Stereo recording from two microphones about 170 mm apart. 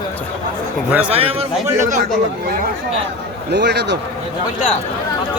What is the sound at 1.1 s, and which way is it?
Speech, 35° right (ahead or behind).